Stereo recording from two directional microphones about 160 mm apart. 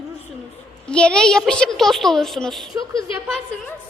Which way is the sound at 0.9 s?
5° left (ahead or behind).